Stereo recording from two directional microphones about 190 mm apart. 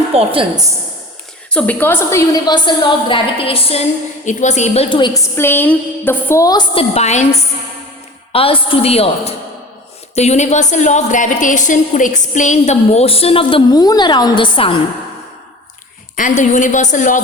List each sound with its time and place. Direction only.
0.2 s a woman's voice: 30° right (ahead or behind)
1.5 s a woman's voice: 5° left (ahead or behind); by 5.2 s 25° left (ahead or behind)
5.4 s a woman's voice: 10° left (ahead or behind); by 14.8 s 25° left (ahead or behind)
16.1 s a woman's voice: 40° left (ahead or behind)